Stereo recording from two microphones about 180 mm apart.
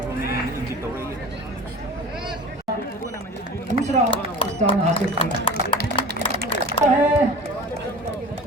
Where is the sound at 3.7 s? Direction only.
40° right (ahead or behind).